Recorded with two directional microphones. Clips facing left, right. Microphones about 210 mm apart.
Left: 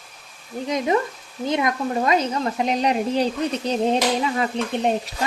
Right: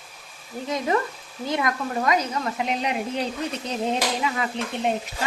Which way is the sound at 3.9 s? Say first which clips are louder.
Left 2 dB; 35° left (ahead or behind).